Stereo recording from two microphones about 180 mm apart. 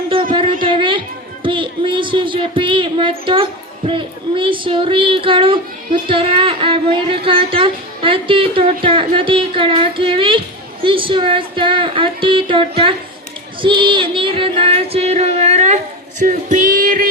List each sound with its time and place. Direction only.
0.1 s a sound: 30° right (ahead or behind)
1.5 s speech: 30° right (ahead or behind)
13.6 s music: 25° right (ahead or behind); by 17.1 s 50° right (ahead or behind)